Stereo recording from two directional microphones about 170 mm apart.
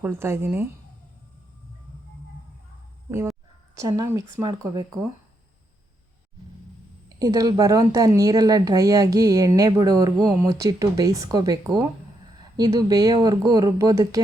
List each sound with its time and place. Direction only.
0.0 s a woman's voice: 15° right (ahead or behind)
3.8 s speech: 20° right (ahead or behind)
7.2 s speech: 20° right (ahead or behind)